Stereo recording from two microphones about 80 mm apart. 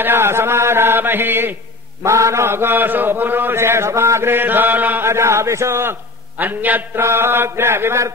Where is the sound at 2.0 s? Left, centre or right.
Right.